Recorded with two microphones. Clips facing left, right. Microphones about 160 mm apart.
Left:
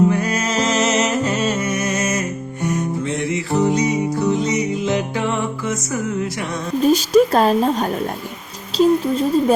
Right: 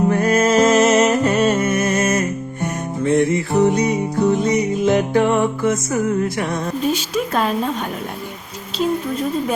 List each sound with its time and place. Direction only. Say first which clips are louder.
0.1 s music: right 5 dB; 50° right (ahead or behind)
6.8 s speech: left 10 dB; 40° left (ahead or behind)